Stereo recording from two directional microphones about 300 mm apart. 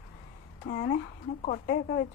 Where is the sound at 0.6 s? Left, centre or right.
Left.